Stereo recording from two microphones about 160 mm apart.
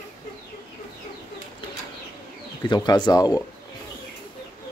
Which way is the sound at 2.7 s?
25° left (ahead or behind).